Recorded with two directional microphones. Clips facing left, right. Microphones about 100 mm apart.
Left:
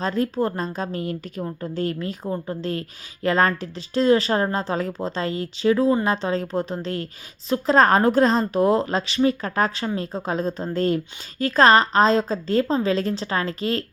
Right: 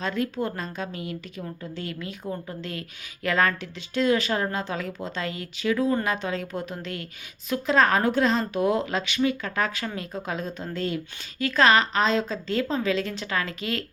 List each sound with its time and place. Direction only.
0.0 s a woman's voice: 35° left (ahead or behind)